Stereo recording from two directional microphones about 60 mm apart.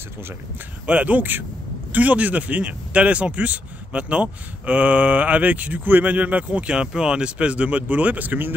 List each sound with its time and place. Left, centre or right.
0.8 s speech: right